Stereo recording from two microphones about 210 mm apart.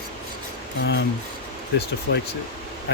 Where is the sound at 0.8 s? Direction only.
55° left (ahead or behind).